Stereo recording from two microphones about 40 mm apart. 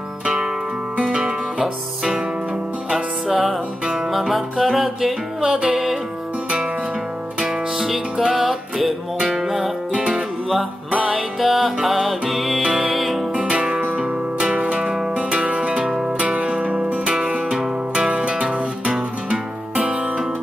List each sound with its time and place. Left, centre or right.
0.2 s music: right
3.3 s music: centre
5.4 s music: right
7.8 s music: centre
9.9 s music: centre
11.1 s music: centre
13.4 s music: right
16.2 s music: right
17.1 s music: centre